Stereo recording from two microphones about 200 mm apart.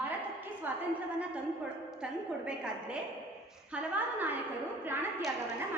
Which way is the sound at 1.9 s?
5° right (ahead or behind).